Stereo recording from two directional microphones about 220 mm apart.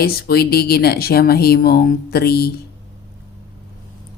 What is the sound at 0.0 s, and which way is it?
Speech, 45° left (ahead or behind).